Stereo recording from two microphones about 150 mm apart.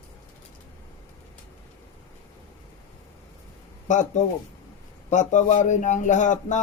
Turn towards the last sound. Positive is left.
turn(degrees=55)  # may be behind; listen again after turning